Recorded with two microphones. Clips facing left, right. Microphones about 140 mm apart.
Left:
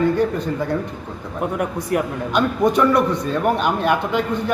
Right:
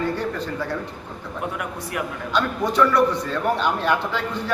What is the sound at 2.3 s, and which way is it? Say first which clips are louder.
A man's voice: left 5 dB; 15° left (ahead or behind).